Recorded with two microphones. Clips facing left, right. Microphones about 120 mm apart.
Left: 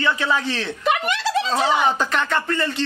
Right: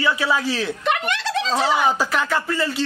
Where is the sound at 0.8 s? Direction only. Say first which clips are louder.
Left 1 dB; 5° left (ahead or behind).